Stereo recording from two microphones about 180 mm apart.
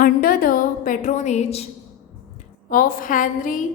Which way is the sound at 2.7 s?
50° left (ahead or behind).